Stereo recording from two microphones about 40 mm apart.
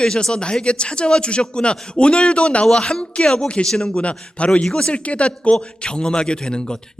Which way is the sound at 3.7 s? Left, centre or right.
Centre.